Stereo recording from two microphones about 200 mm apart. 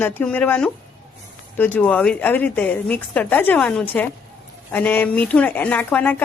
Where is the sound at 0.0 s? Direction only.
5° left (ahead or behind).